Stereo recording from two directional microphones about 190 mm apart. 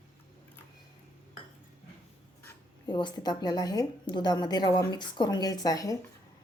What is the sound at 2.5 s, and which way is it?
Speech, 20° left (ahead or behind).